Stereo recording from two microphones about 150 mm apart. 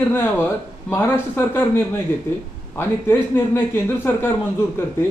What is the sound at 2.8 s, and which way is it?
A man's voice, 15° left (ahead or behind).